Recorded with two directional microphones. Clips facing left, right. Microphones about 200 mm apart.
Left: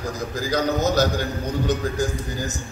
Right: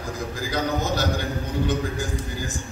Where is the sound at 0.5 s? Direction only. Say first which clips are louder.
Left 5 dB; 40° left (ahead or behind).